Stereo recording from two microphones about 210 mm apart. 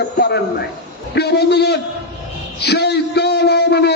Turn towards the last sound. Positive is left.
turn(degrees=50)  # may be behind; listen again after turning